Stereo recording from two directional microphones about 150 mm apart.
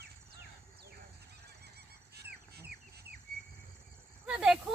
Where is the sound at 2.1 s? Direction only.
90° right.